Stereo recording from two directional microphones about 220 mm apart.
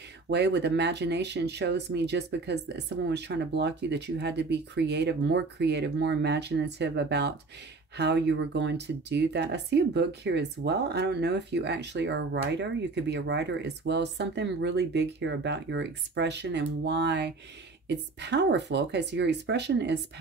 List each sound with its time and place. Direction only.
0.3 s speech: 50° right (ahead or behind)